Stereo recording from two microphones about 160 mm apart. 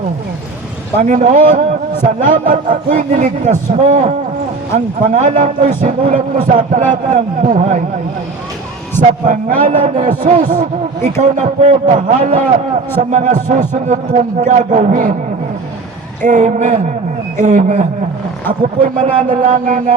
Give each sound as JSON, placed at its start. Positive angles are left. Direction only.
{"t": 0.9, "sound": "a man's voice", "side_deg": -50}
{"t": 5.1, "sound": "a man's voice", "side_deg": -50}
{"t": 9.0, "sound": "a man's voice", "side_deg": -50}
{"t": 16.2, "sound": "a man's voice", "side_deg": -50}